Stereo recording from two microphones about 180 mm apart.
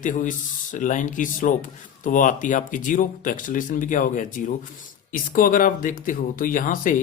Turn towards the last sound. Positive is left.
turn(degrees=50)  # may be behind; listen again after turning